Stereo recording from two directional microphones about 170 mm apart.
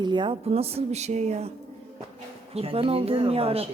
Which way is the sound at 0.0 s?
25° right (ahead or behind).